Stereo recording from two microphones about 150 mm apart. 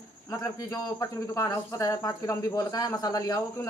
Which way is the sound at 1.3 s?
20° left (ahead or behind).